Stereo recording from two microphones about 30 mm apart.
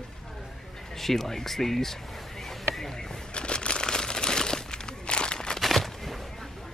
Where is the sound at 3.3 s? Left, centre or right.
Left.